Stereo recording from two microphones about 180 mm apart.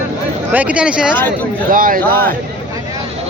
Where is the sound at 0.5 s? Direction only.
5° right (ahead or behind).